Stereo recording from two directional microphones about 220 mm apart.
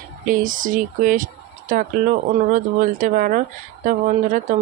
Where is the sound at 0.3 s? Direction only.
35° right (ahead or behind).